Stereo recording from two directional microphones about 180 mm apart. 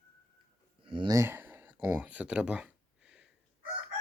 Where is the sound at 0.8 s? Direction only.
25° right (ahead or behind); by 3.2 s 5° right (ahead or behind).